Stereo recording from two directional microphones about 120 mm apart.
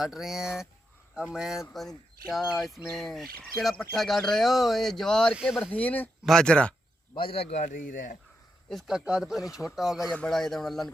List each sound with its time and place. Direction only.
0.0 s speech: 5° right (ahead or behind)
7.1 s a man's voice: 55° left (ahead or behind); by 8.1 s 90° left
8.7 s speech: 5° right (ahead or behind)